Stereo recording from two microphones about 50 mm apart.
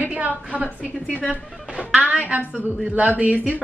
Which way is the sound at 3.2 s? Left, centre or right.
Right.